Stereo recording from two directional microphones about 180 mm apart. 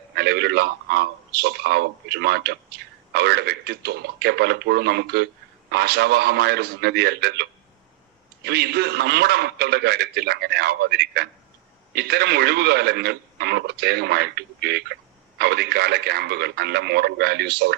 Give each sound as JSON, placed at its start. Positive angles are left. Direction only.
{"t": 0.1, "sound": "speech", "side_deg": -65}
{"t": 8.4, "sound": "speech", "side_deg": -65}